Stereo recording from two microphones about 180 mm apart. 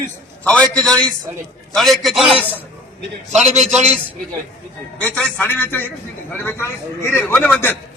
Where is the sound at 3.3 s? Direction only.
40° right (ahead or behind).